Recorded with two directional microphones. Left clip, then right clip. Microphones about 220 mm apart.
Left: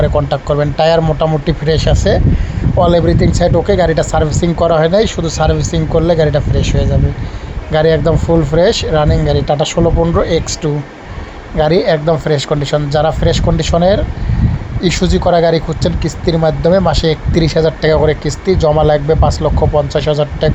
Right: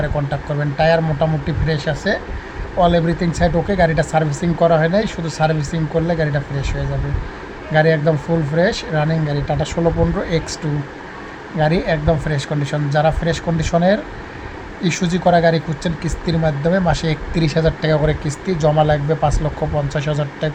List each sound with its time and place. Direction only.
0.0 s speech: 20° left (ahead or behind)
11.5 s speech: 20° left (ahead or behind)